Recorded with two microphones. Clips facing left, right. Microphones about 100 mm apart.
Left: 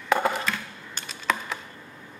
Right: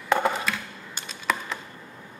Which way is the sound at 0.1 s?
Centre (ahead or behind).